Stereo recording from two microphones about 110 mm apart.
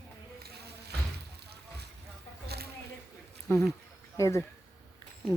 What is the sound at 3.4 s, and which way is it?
Speech, 25° left (ahead or behind).